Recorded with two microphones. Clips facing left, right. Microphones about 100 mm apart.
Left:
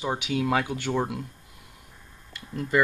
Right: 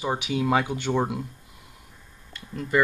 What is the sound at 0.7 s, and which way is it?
Speech, 15° right (ahead or behind).